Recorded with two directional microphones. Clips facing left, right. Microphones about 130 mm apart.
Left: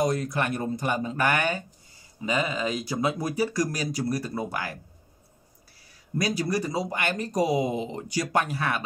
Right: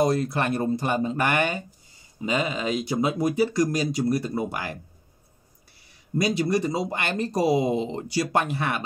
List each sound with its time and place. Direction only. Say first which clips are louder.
0.0 s speech: right 3 dB; 30° right (ahead or behind)
6.1 s speech: right 3 dB; 25° right (ahead or behind)